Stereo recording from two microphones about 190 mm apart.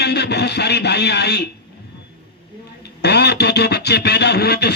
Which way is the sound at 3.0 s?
60° left (ahead or behind).